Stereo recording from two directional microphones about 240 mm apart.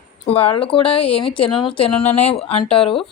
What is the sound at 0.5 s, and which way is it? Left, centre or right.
A woman's voice, left.